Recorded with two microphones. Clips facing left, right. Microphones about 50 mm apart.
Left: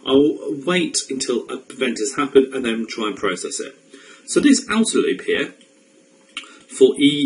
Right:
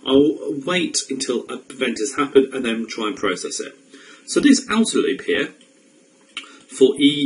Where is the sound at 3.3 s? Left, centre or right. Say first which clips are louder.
Even; centre.